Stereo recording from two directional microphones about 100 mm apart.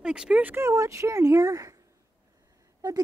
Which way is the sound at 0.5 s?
30° right (ahead or behind).